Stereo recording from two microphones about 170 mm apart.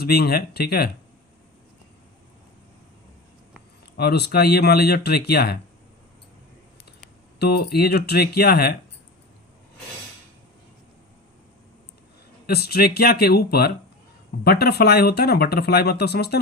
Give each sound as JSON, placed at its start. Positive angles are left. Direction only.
{"t": 0.0, "sound": "speech", "side_deg": 65}
{"t": 3.9, "sound": "speech", "side_deg": 70}
{"t": 7.3, "sound": "speech", "side_deg": 70}
{"t": 12.5, "sound": "speech", "side_deg": 70}